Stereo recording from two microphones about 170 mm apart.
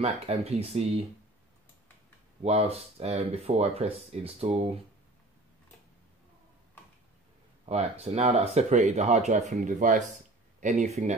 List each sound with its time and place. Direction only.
0.0 s speech: 35° right (ahead or behind)
2.4 s speech: 40° right (ahead or behind)
7.6 s speech: 35° right (ahead or behind)